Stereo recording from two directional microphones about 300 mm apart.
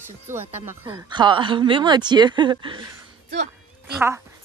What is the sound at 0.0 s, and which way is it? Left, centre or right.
Speech, centre.